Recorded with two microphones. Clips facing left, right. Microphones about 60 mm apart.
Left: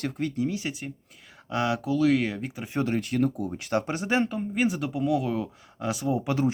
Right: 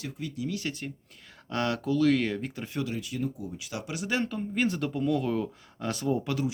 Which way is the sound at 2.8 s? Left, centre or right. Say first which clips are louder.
Left 8 dB; left.